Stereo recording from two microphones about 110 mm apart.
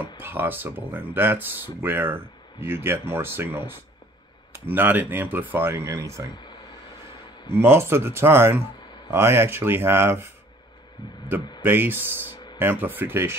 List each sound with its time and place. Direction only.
0.2 s speech: 20° right (ahead or behind)
7.5 s speech: 20° right (ahead or behind)
11.6 s speech: 20° right (ahead or behind)